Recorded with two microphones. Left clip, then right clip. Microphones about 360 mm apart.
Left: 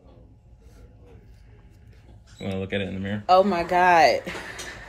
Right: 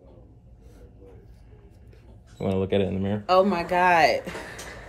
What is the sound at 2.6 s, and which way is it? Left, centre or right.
Speech, right.